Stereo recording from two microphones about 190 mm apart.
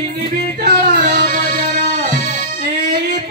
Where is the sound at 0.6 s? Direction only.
55° right (ahead or behind).